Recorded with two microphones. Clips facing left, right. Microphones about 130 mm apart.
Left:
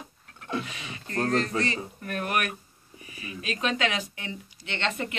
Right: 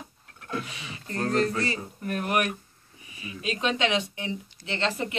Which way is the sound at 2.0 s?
25° right (ahead or behind).